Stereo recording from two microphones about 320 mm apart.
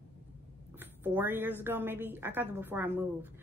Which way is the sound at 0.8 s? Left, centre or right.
Centre.